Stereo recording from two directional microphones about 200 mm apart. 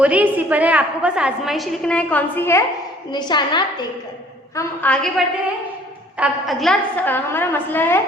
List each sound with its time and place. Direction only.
0.0 s a woman's voice: 5° right (ahead or behind); by 3.6 s 20° left (ahead or behind)
4.5 s a woman's voice: 5° left (ahead or behind)